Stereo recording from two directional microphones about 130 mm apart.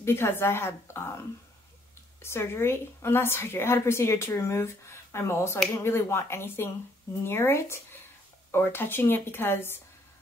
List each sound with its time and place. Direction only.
0.0 s a woman's voice: 20° left (ahead or behind)
2.2 s a woman's voice: 20° left (ahead or behind)